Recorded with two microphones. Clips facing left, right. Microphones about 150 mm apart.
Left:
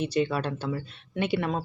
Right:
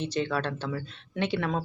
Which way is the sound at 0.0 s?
10° left (ahead or behind).